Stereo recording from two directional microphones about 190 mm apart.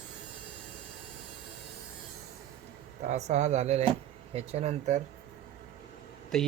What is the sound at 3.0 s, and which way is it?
Speech, 35° right (ahead or behind).